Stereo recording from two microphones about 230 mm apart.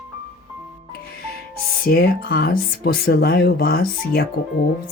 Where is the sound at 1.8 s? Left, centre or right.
Left.